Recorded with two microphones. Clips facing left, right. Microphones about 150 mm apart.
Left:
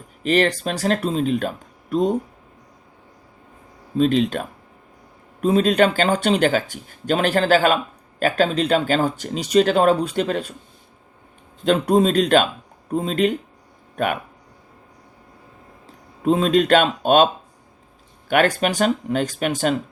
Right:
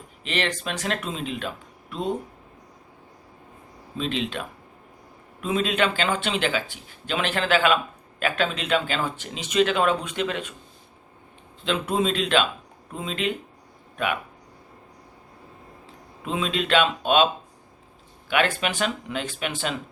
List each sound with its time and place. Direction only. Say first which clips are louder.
0.2 s speech: left 9 dB; 40° left (ahead or behind)
3.9 s speech: left 10 dB; 45° left (ahead or behind)
11.6 s speech: left 8 dB; 45° left (ahead or behind)
16.2 s speech: left 10 dB; 40° left (ahead or behind)
18.3 s speech: left 6 dB; 45° left (ahead or behind)